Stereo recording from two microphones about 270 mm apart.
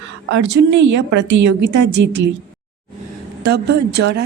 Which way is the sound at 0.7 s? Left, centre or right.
Right.